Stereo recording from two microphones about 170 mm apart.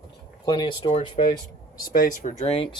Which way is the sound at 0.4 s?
25° left (ahead or behind).